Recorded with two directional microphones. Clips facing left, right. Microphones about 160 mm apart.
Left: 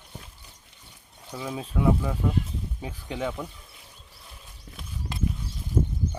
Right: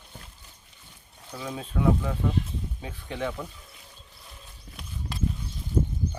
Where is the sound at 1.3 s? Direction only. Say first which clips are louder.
Left 1 dB; 10° left (ahead or behind).